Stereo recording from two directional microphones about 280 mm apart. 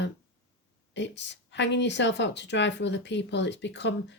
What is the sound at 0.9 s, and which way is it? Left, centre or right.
Speech, left.